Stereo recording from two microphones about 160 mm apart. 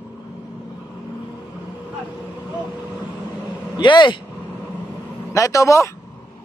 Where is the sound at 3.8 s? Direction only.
30° left (ahead or behind).